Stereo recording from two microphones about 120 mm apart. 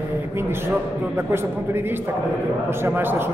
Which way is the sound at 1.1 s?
20° right (ahead or behind).